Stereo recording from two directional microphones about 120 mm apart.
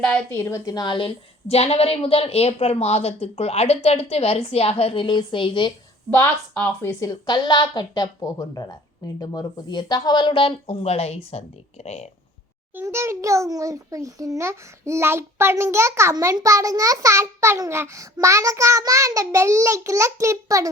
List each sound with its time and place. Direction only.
0.0 s a woman's voice: 10° left (ahead or behind)
0.3 s a woman's voice: 25° left (ahead or behind); by 5.0 s 55° left (ahead or behind)
5.0 s speech: 45° left (ahead or behind)
6.1 s a woman's voice: 20° left (ahead or behind); by 12.0 s 65° left (ahead or behind)
12.7 s a child's voice: 20° right (ahead or behind)